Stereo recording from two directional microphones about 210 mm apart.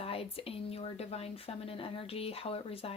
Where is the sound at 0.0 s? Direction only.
25° left (ahead or behind).